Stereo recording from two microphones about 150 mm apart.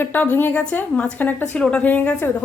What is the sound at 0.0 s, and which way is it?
A woman's voice, 10° left (ahead or behind).